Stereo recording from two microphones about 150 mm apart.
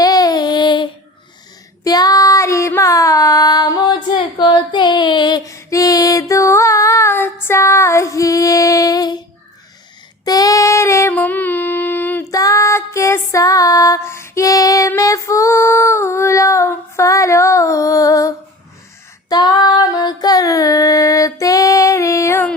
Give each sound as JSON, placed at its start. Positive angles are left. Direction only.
{"t": 0.0, "sound": "child singing", "side_deg": 25}
{"t": 1.8, "sound": "female singing", "side_deg": 25}
{"t": 10.2, "sound": "female singing", "side_deg": 25}